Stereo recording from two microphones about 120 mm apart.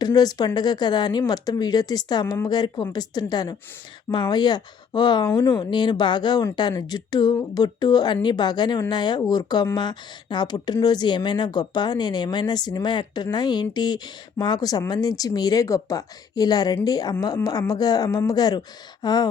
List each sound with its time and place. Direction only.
0.0 s a woman's voice: 35° left (ahead or behind)